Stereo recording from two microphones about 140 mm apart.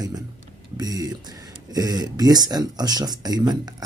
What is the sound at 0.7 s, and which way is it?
Speech, 25° right (ahead or behind).